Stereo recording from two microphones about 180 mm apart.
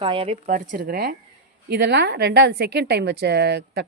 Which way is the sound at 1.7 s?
65° right (ahead or behind).